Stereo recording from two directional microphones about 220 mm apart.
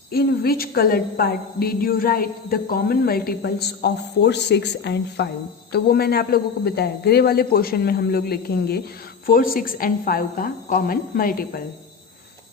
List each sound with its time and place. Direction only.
0.1 s a woman's voice: 45° left (ahead or behind)